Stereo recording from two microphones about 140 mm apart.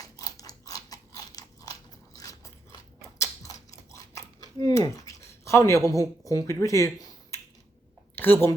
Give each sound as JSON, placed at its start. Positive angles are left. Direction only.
{"t": 0.0, "sound": "biting", "side_deg": 25}
{"t": 3.2, "sound": "a sound", "side_deg": 25}
{"t": 5.9, "sound": "a woman's voice", "side_deg": 25}